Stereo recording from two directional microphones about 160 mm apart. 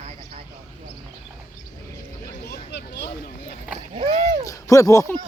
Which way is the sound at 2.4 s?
90° left.